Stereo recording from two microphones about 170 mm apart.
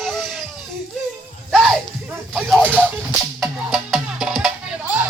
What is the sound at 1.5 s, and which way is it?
Music, centre (ahead or behind).